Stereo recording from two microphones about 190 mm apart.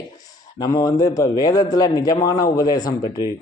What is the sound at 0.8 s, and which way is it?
A man's voice, 20° left (ahead or behind).